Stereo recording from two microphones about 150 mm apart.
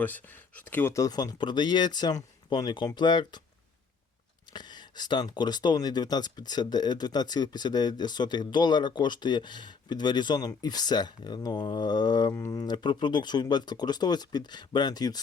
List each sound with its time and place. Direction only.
0.0 s speech: 10° left (ahead or behind); by 3.4 s 30° left (ahead or behind)
4.5 s speech: 30° left (ahead or behind)